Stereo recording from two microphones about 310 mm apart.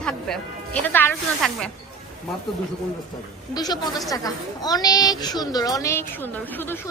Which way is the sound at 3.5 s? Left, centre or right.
Centre.